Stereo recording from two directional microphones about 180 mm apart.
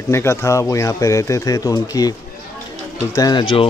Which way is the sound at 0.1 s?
15° left (ahead or behind).